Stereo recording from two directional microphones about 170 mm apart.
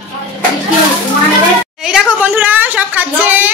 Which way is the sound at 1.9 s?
5° right (ahead or behind).